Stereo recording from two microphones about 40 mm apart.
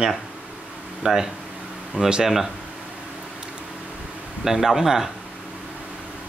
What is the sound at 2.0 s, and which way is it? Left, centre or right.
Speech, right.